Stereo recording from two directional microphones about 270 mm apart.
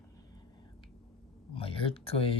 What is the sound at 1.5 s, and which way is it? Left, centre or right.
Speech, left.